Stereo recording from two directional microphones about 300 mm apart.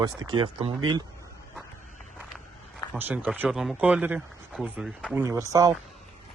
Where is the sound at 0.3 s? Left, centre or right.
Centre.